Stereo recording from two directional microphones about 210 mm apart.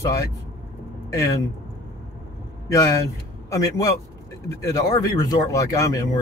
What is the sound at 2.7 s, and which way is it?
Speech, 15° left (ahead or behind).